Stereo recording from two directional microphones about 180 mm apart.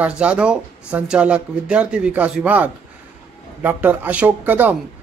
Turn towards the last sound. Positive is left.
turn(degrees=-10)  # may be behind; listen again after turning